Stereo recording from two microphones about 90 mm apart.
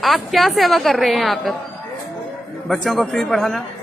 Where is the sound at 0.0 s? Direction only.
Centre (ahead or behind).